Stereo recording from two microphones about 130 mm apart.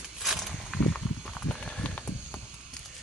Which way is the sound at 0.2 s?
Centre (ahead or behind).